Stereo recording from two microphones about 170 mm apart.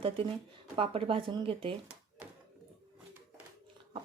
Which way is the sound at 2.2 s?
10° right (ahead or behind).